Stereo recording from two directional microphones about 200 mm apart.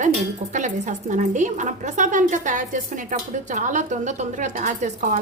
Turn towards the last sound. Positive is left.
turn(degrees=-40)  # may be behind; listen again after turning